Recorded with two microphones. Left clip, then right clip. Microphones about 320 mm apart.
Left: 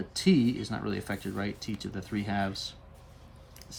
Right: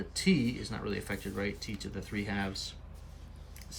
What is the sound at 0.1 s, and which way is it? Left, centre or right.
Speech, centre.